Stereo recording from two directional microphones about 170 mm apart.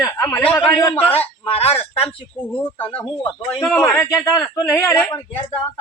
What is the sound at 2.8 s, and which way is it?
A woman's voice, 10° left (ahead or behind).